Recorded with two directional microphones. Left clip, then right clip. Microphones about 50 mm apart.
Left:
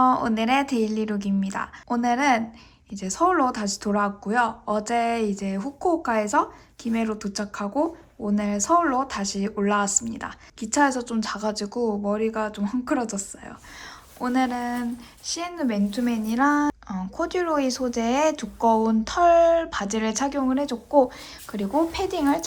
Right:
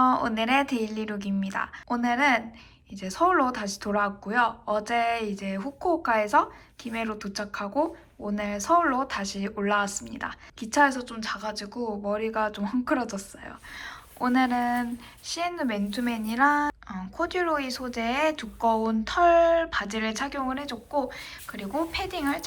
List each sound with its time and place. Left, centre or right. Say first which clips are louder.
0.0 s a woman's voice: left 2 dB; left
10.8 s a woman's voice: left 2 dB; left
12.1 s speech: left 1 dB; left
16.9 s speech: left 2 dB; left
20.6 s speech: left 9 dB; left
21.5 s a woman's voice: left 6 dB; left